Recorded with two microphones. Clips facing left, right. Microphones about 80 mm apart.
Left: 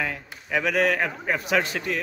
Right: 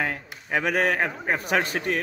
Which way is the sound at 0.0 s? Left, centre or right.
Right.